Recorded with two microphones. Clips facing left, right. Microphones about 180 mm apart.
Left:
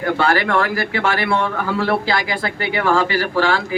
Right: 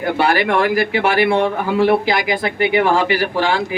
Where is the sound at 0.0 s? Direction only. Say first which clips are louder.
Right 1 dB; 15° right (ahead or behind).